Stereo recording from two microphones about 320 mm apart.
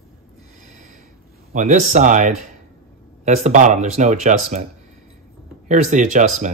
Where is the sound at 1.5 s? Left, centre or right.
Right.